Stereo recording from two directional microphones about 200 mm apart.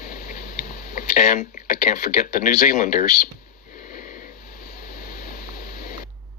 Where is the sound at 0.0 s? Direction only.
40° left (ahead or behind).